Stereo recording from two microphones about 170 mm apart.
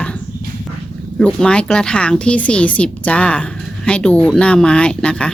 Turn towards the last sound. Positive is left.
turn(degrees=5)  # may be behind; listen again after turning